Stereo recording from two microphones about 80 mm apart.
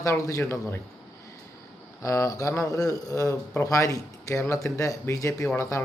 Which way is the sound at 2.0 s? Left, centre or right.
Left.